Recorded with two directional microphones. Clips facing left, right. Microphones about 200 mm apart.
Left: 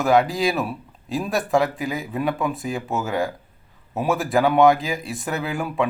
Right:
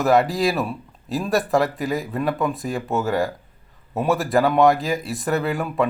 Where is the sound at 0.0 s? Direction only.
Centre (ahead or behind).